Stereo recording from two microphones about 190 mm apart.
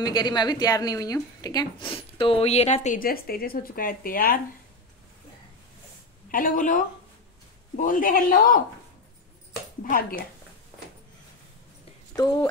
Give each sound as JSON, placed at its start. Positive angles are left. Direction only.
{"t": 0.0, "sound": "speech", "side_deg": 20}
{"t": 6.3, "sound": "a woman's voice", "side_deg": 45}
{"t": 9.8, "sound": "a woman's voice", "side_deg": 50}
{"t": 12.2, "sound": "speech", "side_deg": 20}